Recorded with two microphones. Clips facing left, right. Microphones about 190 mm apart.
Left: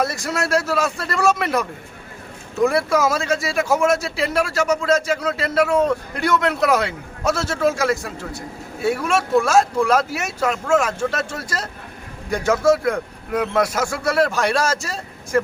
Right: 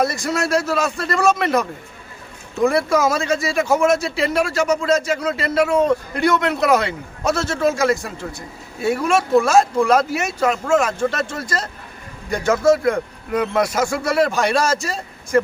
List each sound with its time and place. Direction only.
0.0 s speech: 5° left (ahead or behind)